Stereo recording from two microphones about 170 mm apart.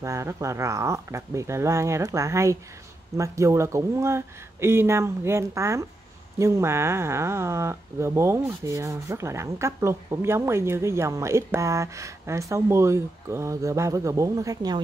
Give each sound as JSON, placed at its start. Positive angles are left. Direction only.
{"t": 0.0, "sound": "speech", "side_deg": -15}